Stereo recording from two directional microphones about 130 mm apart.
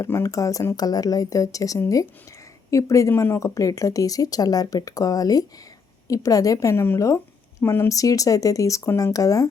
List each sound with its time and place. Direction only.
0.0 s speech: 25° left (ahead or behind)